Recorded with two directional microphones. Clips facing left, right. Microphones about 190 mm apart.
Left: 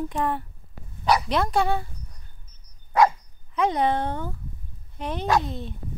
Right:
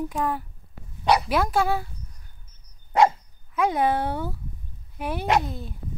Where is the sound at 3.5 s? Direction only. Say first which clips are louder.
Even; 5° right (ahead or behind).